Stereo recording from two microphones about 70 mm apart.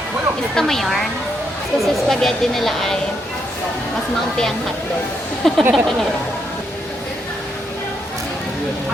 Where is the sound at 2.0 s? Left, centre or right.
Centre.